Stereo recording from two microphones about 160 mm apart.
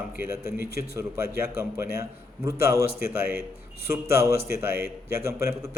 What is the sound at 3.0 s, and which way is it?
Speech, 70° left (ahead or behind).